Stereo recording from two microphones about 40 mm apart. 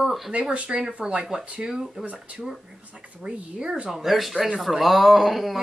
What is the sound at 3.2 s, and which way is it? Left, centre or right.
Speech, right.